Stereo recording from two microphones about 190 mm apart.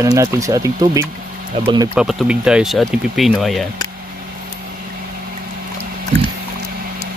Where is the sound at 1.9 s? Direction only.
5° right (ahead or behind).